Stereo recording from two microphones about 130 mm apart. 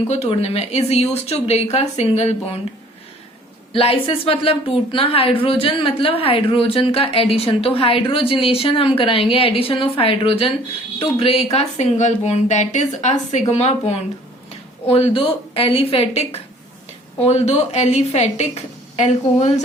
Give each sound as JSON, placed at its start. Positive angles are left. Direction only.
{"t": 0.1, "sound": "a woman's voice", "side_deg": 55}
{"t": 3.7, "sound": "a woman's voice", "side_deg": 45}
{"t": 11.5, "sound": "a woman's voice", "side_deg": 60}